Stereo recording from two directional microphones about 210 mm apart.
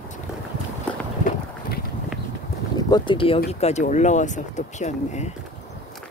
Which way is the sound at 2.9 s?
25° left (ahead or behind).